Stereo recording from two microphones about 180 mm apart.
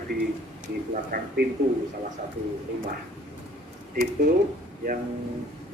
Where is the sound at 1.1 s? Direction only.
50° right (ahead or behind).